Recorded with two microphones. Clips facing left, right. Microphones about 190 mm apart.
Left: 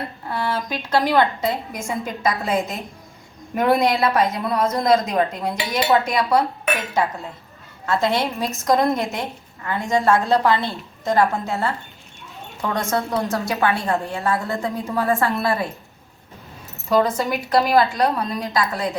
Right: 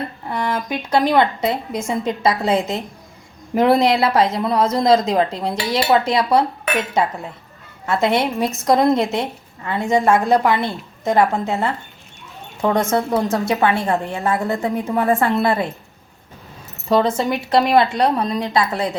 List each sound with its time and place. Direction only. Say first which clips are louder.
0.3 s a woman's voice: right 2 dB; 15° right (ahead or behind)
7.9 s a woman's voice: right 3 dB; 25° right (ahead or behind)
17.0 s a woman's voice: right 2 dB; 25° right (ahead or behind)